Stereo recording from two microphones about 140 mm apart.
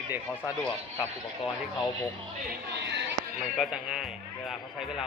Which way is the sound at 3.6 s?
5° right (ahead or behind).